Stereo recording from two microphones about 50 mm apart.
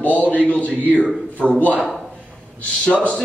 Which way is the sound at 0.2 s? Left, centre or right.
Left.